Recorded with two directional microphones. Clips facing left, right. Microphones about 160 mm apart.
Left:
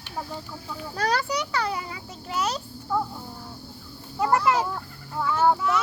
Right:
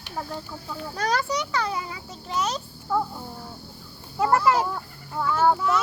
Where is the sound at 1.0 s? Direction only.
35° left (ahead or behind).